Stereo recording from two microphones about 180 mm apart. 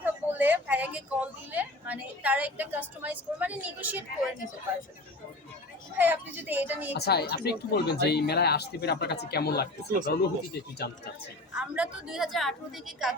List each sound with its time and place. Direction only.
0.0 s speech: 10° right (ahead or behind)
6.0 s a woman's voice: 10° right (ahead or behind)
6.9 s speech: 65° left (ahead or behind)
11.5 s a woman's voice: 5° right (ahead or behind)